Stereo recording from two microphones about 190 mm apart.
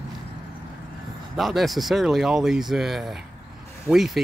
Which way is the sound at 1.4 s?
Centre (ahead or behind).